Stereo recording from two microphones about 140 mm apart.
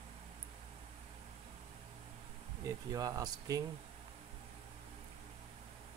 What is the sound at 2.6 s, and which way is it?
Speech, 25° right (ahead or behind).